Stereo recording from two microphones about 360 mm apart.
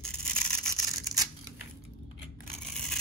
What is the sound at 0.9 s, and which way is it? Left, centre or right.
Scissors, centre.